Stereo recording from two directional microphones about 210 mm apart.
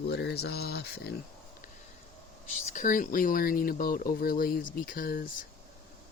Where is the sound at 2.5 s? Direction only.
40° left (ahead or behind).